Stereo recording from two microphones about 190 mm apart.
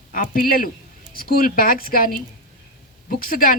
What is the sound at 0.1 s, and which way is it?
A woman's voice, 50° left (ahead or behind).